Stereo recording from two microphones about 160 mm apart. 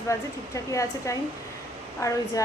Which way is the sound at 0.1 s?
20° left (ahead or behind).